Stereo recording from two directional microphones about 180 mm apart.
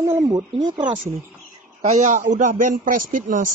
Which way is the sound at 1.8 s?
40° right (ahead or behind).